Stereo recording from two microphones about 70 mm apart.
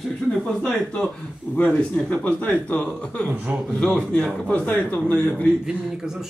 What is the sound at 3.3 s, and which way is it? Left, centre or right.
Speech, right.